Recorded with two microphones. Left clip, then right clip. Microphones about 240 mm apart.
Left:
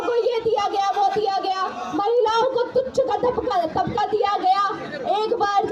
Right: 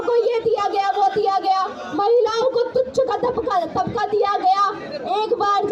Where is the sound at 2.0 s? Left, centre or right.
Right.